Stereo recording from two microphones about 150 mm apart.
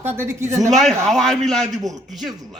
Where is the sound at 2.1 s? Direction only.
Centre (ahead or behind).